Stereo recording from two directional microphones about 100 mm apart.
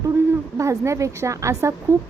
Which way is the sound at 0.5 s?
30° right (ahead or behind).